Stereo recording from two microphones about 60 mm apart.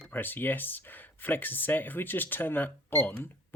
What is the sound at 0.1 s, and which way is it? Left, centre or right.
Speech, left.